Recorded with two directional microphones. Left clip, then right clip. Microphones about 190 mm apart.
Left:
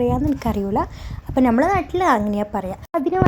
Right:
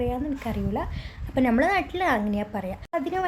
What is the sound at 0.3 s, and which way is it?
Speech, 40° left (ahead or behind).